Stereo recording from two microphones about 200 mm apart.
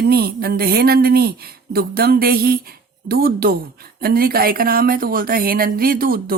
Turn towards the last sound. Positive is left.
turn(degrees=-45)  # may be behind; listen again after turning